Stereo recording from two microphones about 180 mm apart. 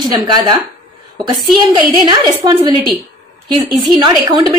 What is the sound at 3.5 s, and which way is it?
Speech, 25° right (ahead or behind).